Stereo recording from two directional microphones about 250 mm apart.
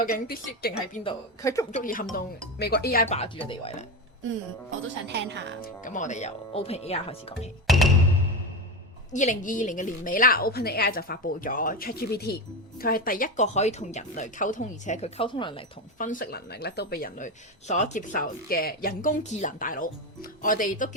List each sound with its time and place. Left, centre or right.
0.0 s speech: left
1.4 s speech: centre
1.7 s speech: left
4.7 s speech: right
5.8 s speech: left
7.7 s music: centre
9.1 s speech: left
16.0 s speech: left